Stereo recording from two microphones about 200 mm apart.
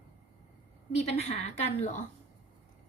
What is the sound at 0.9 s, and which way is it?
A woman's voice, 30° left (ahead or behind).